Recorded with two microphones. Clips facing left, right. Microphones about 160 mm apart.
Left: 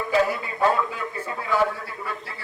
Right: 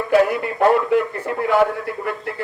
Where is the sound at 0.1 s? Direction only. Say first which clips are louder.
Right 7 dB; 65° right (ahead or behind).